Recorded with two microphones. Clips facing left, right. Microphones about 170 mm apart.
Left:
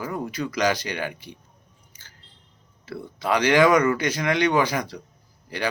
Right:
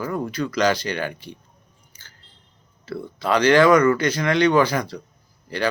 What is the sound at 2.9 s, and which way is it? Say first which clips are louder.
Speech: right 2 dB; 15° left (ahead or behind).